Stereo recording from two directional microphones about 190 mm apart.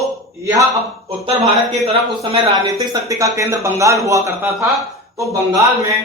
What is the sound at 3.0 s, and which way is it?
Speech, 15° right (ahead or behind).